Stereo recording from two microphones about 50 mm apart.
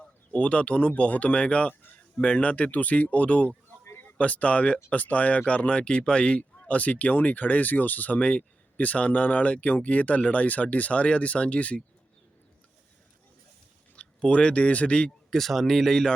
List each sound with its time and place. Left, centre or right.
0.3 s speech: left
13.9 s speech: left
15.3 s speech: centre